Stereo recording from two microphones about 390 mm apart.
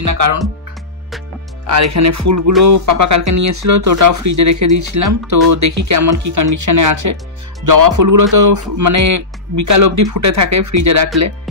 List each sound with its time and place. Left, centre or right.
0.0 s speech: right
1.7 s speech: right